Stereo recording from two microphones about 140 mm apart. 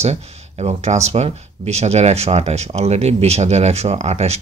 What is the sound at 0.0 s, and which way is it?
Speech, 50° right (ahead or behind).